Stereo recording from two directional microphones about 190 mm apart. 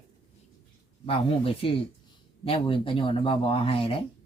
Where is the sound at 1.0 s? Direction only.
30° left (ahead or behind).